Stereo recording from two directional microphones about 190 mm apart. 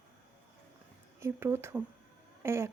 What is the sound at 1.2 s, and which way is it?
A woman's voice, 15° right (ahead or behind).